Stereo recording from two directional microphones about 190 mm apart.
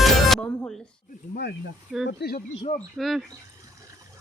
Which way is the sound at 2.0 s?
55° left (ahead or behind).